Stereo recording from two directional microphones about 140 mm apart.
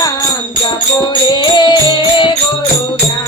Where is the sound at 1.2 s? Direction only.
30° left (ahead or behind).